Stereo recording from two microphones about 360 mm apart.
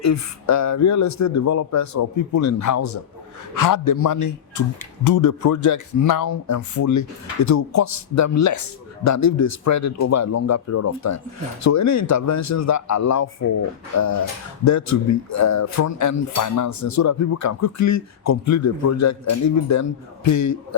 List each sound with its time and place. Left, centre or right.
0.0 s a man's voice: left